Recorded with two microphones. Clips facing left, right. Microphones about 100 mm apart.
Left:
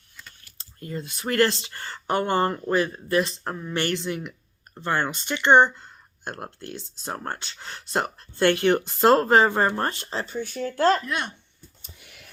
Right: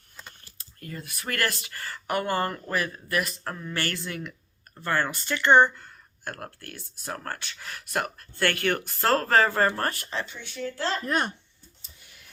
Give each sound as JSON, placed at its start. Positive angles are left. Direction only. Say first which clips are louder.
{"t": 0.2, "sound": "typing", "louder": "right 1 dB", "side_deg": -30}
{"t": 0.6, "sound": "speech", "louder": "left 6 dB", "side_deg": 25}
{"t": 11.0, "sound": "speech", "louder": "right 3 dB", "side_deg": -40}
{"t": 11.8, "sound": "a sound", "louder": "left 6 dB", "side_deg": 65}